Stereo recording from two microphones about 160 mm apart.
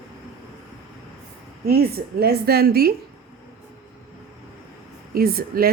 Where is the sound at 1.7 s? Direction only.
75° right (ahead or behind).